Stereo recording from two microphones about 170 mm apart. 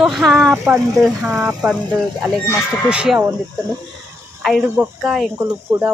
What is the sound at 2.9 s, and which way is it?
Speech, 5° right (ahead or behind).